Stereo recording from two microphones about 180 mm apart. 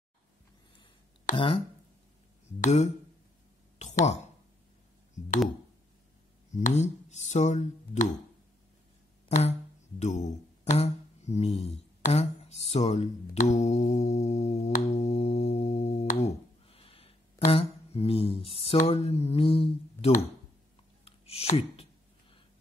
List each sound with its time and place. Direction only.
1.3 s speech: 30° left (ahead or behind)
2.6 s speech: 40° left (ahead or behind)
3.7 s a sound: 40° left (ahead or behind)
6.5 s speech: 40° left (ahead or behind)
9.3 s speech: 40° left (ahead or behind)
12.0 s mantra: 35° left (ahead or behind)
16.1 s a sound: 35° left (ahead or behind)
18.7 s speech: 35° left (ahead or behind)
21.0 s a sound: 35° left (ahead or behind)